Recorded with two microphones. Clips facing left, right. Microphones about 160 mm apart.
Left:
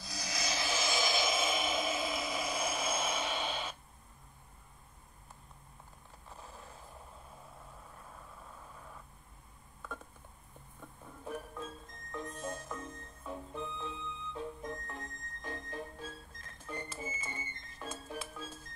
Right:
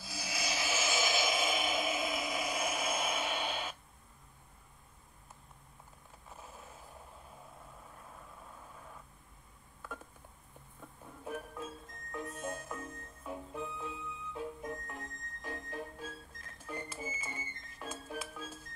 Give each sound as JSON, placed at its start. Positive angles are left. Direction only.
{"t": 0.0, "sound": "rub", "side_deg": -5}
{"t": 6.4, "sound": "a sound", "side_deg": -5}
{"t": 11.2, "sound": "music", "side_deg": -5}